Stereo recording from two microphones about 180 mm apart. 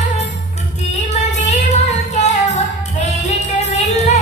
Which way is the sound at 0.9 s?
40° left (ahead or behind).